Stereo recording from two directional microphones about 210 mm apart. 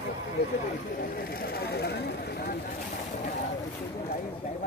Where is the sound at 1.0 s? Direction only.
45° left (ahead or behind).